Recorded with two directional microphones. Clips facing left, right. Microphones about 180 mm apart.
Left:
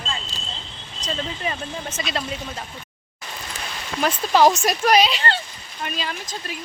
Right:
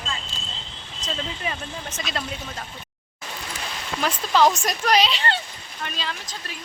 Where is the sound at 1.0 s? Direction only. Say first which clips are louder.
Left 2 dB; centre (ahead or behind).